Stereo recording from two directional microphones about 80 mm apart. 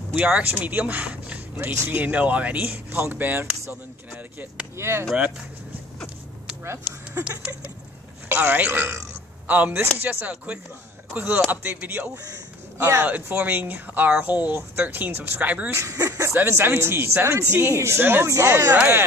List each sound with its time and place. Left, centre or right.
0.1 s speech: centre
4.7 s speech: right
7.2 s a sound: centre
8.3 s speech: right
12.7 s speech: right
13.0 s speech: right
15.7 s speech: right